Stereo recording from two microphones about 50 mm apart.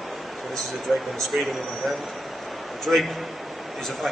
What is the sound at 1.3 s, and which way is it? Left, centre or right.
Speech, centre.